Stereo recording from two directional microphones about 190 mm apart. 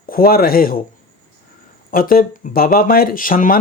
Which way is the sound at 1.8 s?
50° left (ahead or behind).